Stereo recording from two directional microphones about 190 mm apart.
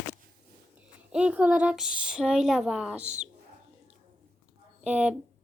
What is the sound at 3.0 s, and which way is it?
Speech, 35° right (ahead or behind).